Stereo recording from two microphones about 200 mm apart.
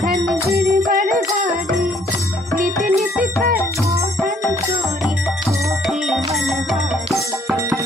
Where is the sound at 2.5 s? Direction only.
45° right (ahead or behind).